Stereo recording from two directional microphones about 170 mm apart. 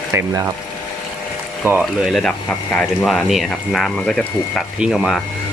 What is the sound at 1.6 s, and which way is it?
Speech, 5° right (ahead or behind).